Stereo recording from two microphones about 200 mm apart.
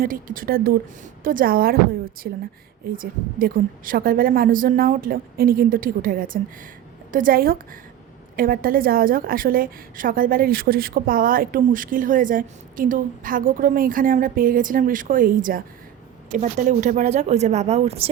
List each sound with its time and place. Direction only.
0.0 s a woman's voice: 45° right (ahead or behind)